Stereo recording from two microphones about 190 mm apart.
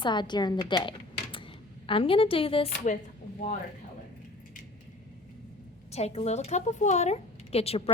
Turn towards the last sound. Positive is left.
turn(degrees=30)  # may be behind; listen again after turning